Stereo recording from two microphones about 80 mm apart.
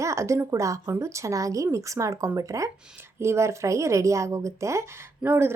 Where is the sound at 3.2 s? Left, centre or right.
Right.